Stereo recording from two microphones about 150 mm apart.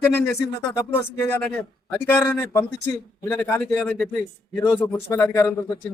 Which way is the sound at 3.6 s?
5° left (ahead or behind).